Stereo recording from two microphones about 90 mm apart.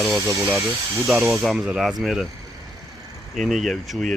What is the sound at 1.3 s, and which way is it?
Speech, 5° right (ahead or behind).